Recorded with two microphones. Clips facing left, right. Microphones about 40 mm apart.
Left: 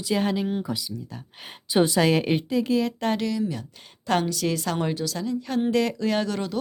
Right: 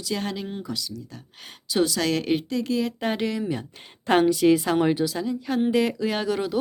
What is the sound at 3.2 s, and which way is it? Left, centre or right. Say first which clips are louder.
A woman's voice: even; right.